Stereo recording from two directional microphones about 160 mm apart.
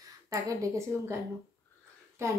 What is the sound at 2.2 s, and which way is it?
Speech, 15° right (ahead or behind).